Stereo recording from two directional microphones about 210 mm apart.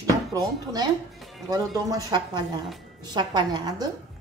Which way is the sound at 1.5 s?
15° right (ahead or behind).